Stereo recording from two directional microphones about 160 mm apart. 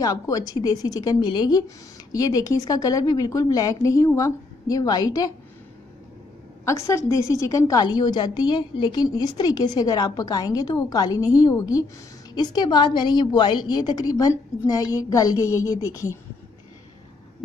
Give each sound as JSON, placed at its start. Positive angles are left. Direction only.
{"t": 0.0, "sound": "a woman's voice", "side_deg": 25}
{"t": 6.6, "sound": "a woman's voice", "side_deg": 20}